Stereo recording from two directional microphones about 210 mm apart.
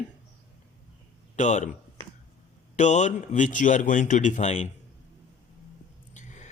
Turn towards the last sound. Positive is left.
turn(degrees=35)  # may be behind; listen again after turning